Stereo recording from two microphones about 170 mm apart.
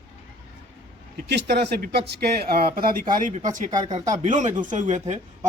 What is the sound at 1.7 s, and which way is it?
Speech, 65° right (ahead or behind).